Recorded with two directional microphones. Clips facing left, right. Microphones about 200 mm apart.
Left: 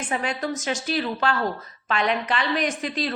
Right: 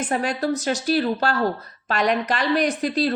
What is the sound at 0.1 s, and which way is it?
A woman's voice, 40° right (ahead or behind).